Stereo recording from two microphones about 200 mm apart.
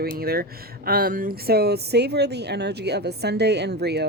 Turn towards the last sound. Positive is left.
turn(degrees=-55)  # may be behind; listen again after turning